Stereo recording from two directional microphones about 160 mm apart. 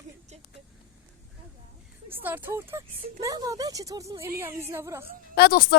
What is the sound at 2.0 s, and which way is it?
Speech, 10° right (ahead or behind).